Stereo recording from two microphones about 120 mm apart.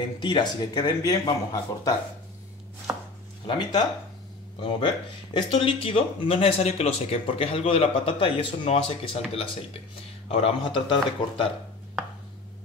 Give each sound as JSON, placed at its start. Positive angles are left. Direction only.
{"t": 0.2, "sound": "speech", "side_deg": 35}
{"t": 3.4, "sound": "speech", "side_deg": 40}
{"t": 10.3, "sound": "speech", "side_deg": 50}